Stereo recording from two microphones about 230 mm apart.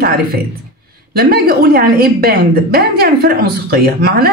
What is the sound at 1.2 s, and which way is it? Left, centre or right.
A woman's voice, right.